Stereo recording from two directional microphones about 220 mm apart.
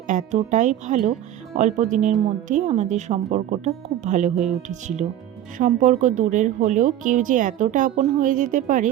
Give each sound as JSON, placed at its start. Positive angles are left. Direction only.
{"t": 0.1, "sound": "speech", "side_deg": -35}